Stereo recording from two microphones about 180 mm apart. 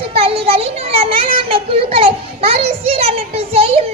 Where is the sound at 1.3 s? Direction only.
30° right (ahead or behind).